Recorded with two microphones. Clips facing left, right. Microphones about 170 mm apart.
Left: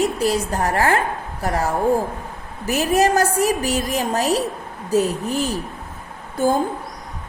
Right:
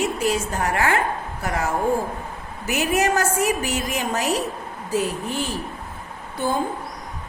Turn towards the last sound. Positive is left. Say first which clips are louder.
# left 5 dB
turn(degrees=45)  # may be behind; listen again after turning